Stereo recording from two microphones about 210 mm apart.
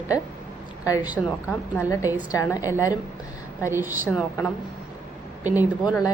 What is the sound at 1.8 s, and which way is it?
Speech, 15° left (ahead or behind).